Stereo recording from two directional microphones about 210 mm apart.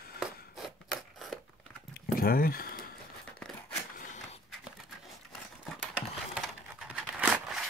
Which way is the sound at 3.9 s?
35° left (ahead or behind).